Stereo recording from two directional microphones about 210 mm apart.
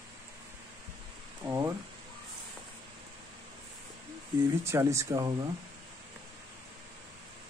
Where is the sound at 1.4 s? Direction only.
15° right (ahead or behind).